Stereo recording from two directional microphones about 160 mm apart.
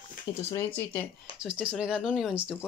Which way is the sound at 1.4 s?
5° right (ahead or behind).